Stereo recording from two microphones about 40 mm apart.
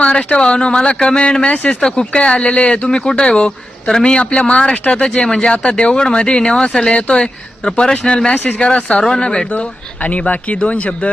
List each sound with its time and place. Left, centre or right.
0.0 s speech: left
1.5 s speech: left
1.8 s speech: left
5.0 s speech: centre
9.5 s speech: left